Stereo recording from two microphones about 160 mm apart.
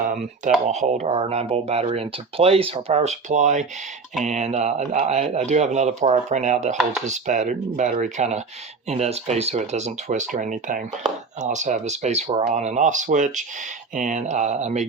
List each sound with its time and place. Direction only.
0.0 s speech: 55° right (ahead or behind)